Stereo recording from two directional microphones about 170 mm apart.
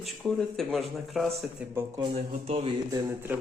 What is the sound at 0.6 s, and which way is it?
Speech, centre (ahead or behind).